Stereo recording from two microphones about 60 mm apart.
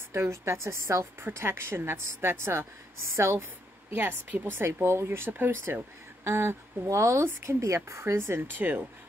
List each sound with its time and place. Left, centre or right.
0.1 s speech: right
1.4 s a woman's voice: right